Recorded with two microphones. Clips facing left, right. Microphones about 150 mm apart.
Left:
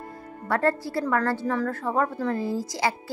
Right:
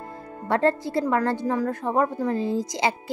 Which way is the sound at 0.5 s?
20° right (ahead or behind).